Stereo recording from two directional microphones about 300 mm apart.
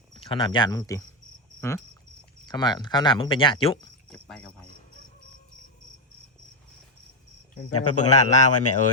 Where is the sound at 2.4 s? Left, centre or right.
Centre.